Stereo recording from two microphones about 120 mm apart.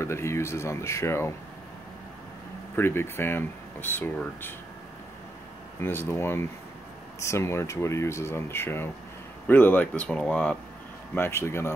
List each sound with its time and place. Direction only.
0.0 s speech: 20° left (ahead or behind)
2.7 s speech: 20° left (ahead or behind)
5.8 s speech: 20° left (ahead or behind)
11.1 s speech: 20° left (ahead or behind)